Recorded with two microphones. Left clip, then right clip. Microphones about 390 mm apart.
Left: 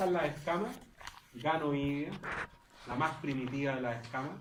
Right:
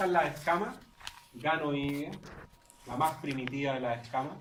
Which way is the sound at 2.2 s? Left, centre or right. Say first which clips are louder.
Left 11 dB; left.